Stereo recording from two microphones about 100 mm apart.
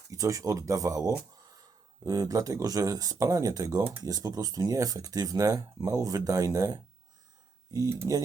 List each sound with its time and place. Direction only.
0.1 s speech: 35° right (ahead or behind)